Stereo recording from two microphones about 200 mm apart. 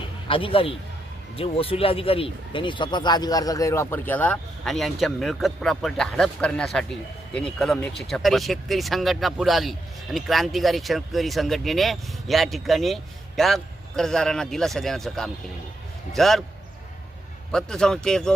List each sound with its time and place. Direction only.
0.0 s a sound: 25° left (ahead or behind)
1.4 s speech: 30° left (ahead or behind); by 16.4 s centre (ahead or behind)
17.5 s speech: 5° left (ahead or behind)